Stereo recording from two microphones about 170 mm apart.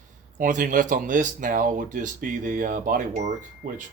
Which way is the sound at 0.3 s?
50° right (ahead or behind).